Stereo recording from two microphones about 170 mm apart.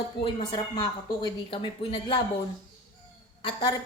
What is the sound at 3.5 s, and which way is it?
Speech, 25° left (ahead or behind).